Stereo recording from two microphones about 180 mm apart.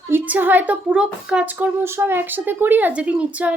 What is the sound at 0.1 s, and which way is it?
A woman's voice, 10° right (ahead or behind).